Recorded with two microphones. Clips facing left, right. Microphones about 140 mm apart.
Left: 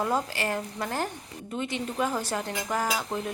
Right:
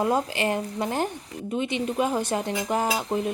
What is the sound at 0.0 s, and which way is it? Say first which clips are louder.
Speech: right 4 dB; 20° right (ahead or behind).